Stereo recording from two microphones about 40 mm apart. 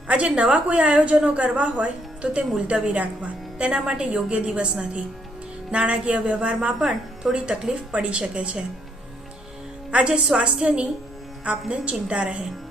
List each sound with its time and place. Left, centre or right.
0.3 s speech: centre
0.5 s a woman's voice: right
1.5 s a woman's voice: centre
6.7 s speech: centre
7.7 s a woman's voice: right
10.1 s a woman's voice: right